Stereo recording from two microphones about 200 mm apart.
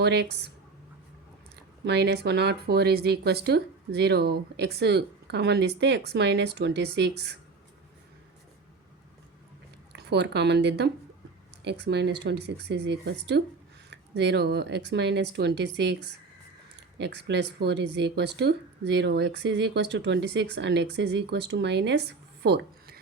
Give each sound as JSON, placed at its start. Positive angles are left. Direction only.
{"t": 0.0, "sound": "speech", "side_deg": -55}
{"t": 1.8, "sound": "speech", "side_deg": -55}
{"t": 9.9, "sound": "speech", "side_deg": -60}
{"t": 22.4, "sound": "a sound", "side_deg": -55}